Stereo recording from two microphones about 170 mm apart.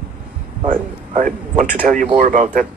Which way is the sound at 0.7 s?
50° right (ahead or behind).